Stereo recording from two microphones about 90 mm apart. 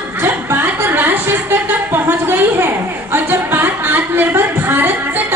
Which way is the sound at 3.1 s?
25° right (ahead or behind).